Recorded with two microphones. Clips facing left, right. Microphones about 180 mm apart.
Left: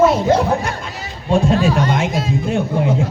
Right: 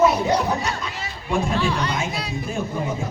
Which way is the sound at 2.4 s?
75° left (ahead or behind).